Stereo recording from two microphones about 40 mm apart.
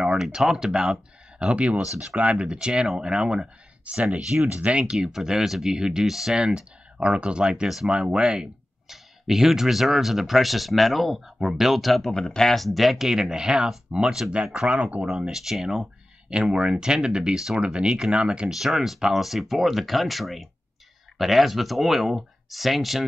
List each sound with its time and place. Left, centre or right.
0.0 s a sound: centre
0.4 s speech: centre
1.4 s speech: right
2.1 s speech: right
3.8 s speech: right
4.9 s speech: centre
7.6 s speech: centre
7.9 s speech: right
8.9 s speech: centre
12.5 s speech: centre; by 15.0 s right
15.3 s speech: centre; by 18.5 s right
18.5 s speech: centre